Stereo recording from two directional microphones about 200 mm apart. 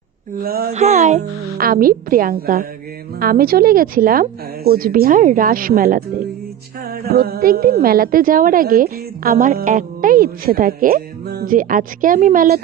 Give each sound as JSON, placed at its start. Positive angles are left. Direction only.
{"t": 0.4, "sound": "a woman's voice", "side_deg": -50}
{"t": 0.7, "sound": "a woman's voice", "side_deg": -35}